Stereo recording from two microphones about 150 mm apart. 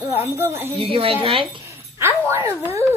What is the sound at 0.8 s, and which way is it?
Speech, 35° right (ahead or behind).